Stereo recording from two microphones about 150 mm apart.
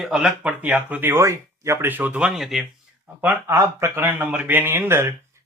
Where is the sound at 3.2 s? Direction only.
20° right (ahead or behind).